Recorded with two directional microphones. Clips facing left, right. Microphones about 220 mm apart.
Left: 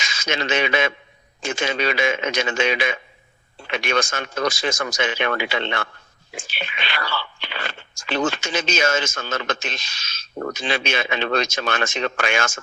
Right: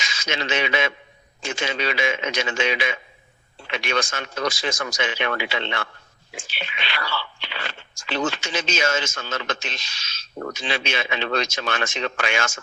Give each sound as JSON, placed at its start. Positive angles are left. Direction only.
{"t": 0.0, "sound": "a man's voice", "side_deg": 50}